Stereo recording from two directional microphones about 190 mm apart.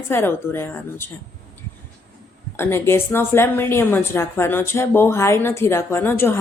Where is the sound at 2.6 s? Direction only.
10° left (ahead or behind).